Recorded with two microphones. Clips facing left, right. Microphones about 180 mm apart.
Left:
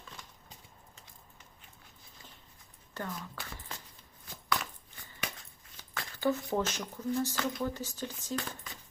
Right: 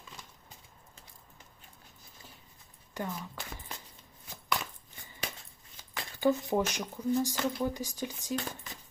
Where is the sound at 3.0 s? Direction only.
15° right (ahead or behind).